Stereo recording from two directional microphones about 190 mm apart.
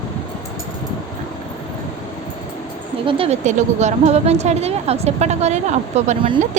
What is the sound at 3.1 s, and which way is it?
A woman's voice, 30° right (ahead or behind).